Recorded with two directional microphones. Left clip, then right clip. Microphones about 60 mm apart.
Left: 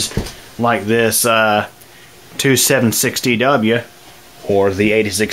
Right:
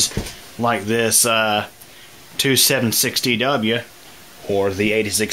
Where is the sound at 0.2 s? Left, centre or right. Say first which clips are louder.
Left 4 dB; centre.